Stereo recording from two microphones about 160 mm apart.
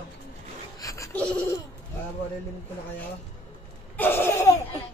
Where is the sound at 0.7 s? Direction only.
20° left (ahead or behind).